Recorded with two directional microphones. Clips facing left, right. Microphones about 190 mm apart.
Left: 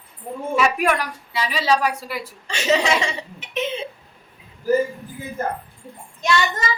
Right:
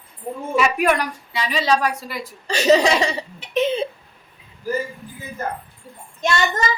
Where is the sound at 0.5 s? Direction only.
Centre (ahead or behind).